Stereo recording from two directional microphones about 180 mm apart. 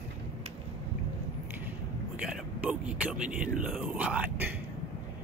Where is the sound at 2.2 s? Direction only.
5° right (ahead or behind).